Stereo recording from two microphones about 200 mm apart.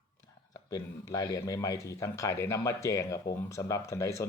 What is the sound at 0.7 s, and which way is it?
Speech, 20° left (ahead or behind).